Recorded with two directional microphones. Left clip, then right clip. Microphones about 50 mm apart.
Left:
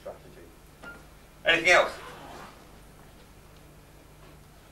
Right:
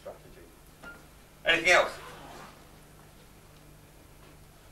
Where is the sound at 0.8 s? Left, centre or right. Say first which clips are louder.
Left 2 dB; left.